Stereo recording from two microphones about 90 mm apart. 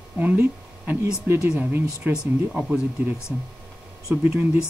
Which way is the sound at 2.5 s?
10° right (ahead or behind).